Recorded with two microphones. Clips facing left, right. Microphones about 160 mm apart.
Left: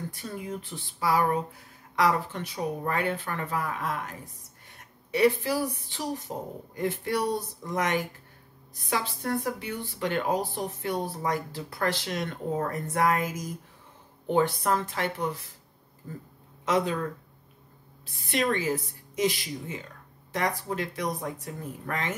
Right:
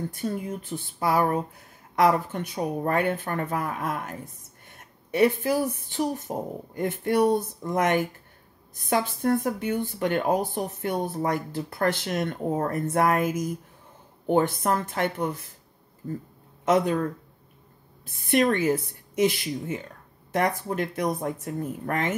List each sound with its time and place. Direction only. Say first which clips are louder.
0.1 s a woman's voice: right 5 dB; 50° right (ahead or behind)
16.6 s speech: right 4 dB; 50° right (ahead or behind)
18.0 s speech: right 6 dB; 50° right (ahead or behind)